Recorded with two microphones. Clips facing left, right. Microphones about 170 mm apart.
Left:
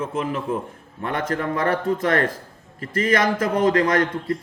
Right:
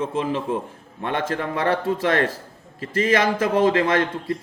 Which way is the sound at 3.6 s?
25° right (ahead or behind).